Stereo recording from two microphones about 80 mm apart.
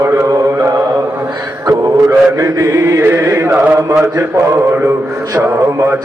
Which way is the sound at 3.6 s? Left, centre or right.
Right.